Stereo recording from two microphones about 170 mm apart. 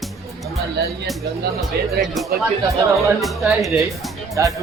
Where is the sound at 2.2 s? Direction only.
Centre (ahead or behind).